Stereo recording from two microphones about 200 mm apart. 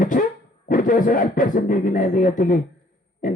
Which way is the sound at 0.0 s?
40° left (ahead or behind).